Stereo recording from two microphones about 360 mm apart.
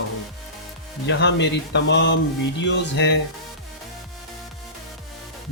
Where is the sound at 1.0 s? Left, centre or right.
Left.